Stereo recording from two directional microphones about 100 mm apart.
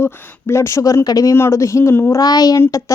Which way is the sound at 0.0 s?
25° left (ahead or behind).